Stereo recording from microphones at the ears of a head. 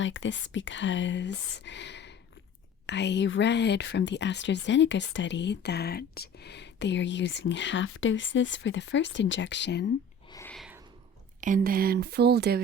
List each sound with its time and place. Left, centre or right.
0.0 s speech: left
11.3 s speech: right